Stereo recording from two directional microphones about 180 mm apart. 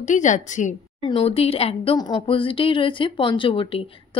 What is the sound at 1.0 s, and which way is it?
A woman's voice, 30° left (ahead or behind).